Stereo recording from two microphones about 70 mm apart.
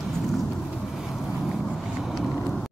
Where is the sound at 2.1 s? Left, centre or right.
Centre.